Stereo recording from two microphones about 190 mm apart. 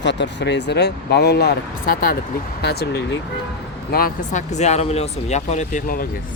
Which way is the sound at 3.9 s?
45° left (ahead or behind).